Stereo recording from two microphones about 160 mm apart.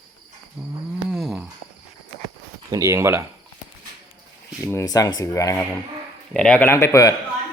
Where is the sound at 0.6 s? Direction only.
5° right (ahead or behind).